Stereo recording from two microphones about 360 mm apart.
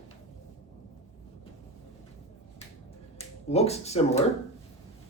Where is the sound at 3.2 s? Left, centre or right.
Centre.